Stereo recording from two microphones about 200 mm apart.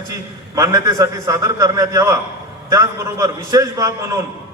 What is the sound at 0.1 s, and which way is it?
A man's voice, 15° right (ahead or behind).